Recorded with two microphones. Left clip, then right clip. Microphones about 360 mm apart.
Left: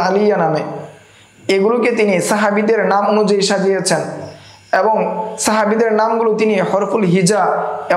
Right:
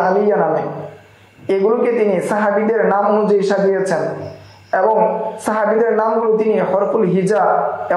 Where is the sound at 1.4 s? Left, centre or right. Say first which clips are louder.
Left 1 dB; left.